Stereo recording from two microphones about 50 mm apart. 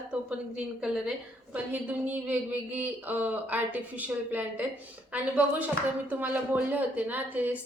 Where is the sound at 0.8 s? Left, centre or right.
Centre.